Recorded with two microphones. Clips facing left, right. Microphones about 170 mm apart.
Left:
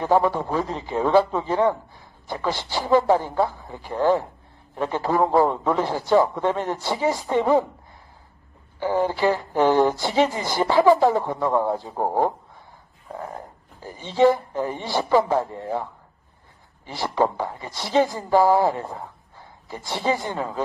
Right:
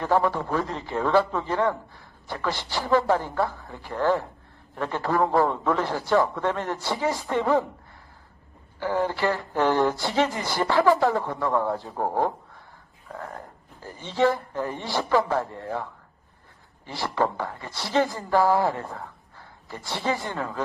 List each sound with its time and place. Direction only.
0.0 s a man's voice: 15° left (ahead or behind)
8.7 s a man's voice: 15° left (ahead or behind)